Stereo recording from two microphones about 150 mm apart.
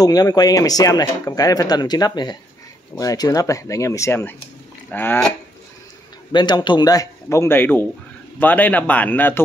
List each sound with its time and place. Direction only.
0.0 s a man's voice: 25° left (ahead or behind)
6.3 s a man's voice: 30° left (ahead or behind); by 9.4 s 10° left (ahead or behind)